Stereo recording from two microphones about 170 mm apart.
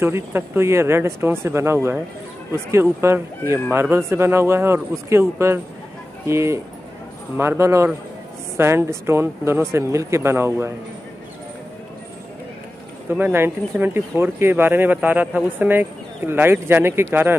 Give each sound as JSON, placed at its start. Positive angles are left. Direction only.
{"t": 0.0, "sound": "speech", "side_deg": -15}
{"t": 13.1, "sound": "speech", "side_deg": -15}